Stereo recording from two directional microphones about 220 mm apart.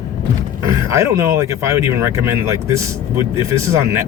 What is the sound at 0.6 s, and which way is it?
Speech, 15° right (ahead or behind).